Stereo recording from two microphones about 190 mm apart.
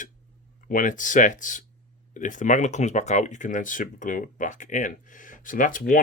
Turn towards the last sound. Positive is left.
turn(degrees=45)  # may be behind; listen again after turning